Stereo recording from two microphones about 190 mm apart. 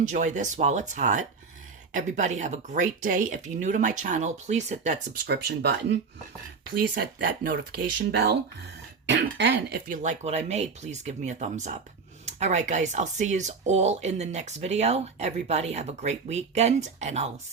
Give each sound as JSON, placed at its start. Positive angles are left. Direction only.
{"t": 0.0, "sound": "speech", "side_deg": -40}
{"t": 5.2, "sound": "speech", "side_deg": -55}
{"t": 10.0, "sound": "speech", "side_deg": -35}